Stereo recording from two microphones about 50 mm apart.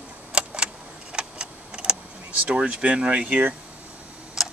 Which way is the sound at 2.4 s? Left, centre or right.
Centre.